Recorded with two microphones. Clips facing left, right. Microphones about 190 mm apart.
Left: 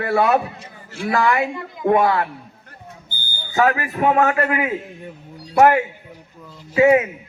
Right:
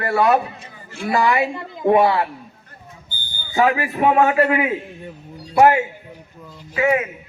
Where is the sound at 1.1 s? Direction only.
5° right (ahead or behind).